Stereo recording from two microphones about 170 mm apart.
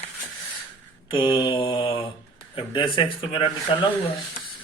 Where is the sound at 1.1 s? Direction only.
30° left (ahead or behind).